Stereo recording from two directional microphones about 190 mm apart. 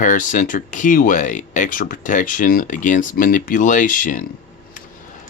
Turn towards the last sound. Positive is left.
turn(degrees=45)  # may be behind; listen again after turning